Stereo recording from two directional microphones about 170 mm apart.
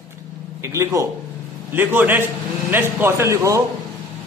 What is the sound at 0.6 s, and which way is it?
A man's voice, 15° right (ahead or behind).